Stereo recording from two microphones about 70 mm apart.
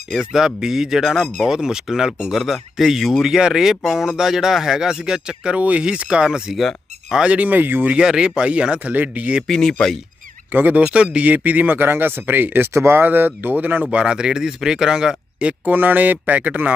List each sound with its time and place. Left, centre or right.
0.1 s speech: centre
6.6 s a sound: centre
7.2 s speech: centre
7.9 s speech: centre
9.5 s speech: centre
10.5 s speech: right
13.9 s speech: centre
15.7 s speech: right